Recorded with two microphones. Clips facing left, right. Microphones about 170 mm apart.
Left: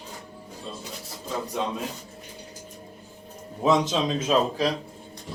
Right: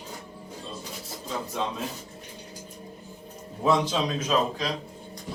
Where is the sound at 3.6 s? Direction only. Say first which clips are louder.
Left 2 dB; 20° left (ahead or behind).